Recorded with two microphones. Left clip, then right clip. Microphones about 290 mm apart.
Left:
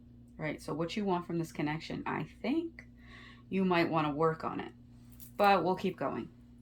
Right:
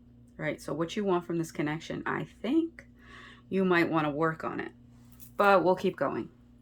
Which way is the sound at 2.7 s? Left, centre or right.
Centre.